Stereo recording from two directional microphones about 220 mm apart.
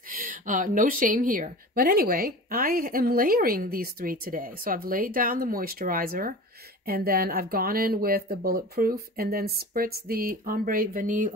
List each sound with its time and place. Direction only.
0.1 s speech: 35° right (ahead or behind)